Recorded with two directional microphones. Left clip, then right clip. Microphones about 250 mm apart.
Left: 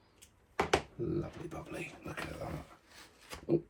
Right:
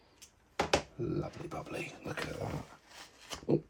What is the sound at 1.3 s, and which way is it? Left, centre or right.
Speech, right.